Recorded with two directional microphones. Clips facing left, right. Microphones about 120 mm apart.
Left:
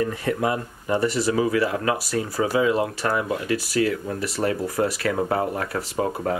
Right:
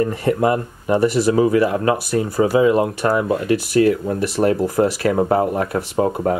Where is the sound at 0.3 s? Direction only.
40° right (ahead or behind).